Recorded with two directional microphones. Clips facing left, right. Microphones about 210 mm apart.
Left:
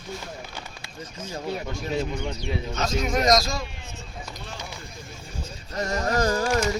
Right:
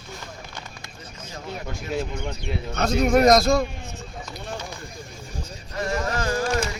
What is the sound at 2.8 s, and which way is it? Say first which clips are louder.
Speech: right 8 dB; 60° right (ahead or behind).